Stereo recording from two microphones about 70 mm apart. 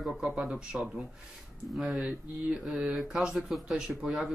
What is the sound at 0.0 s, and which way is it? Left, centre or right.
Speech, centre.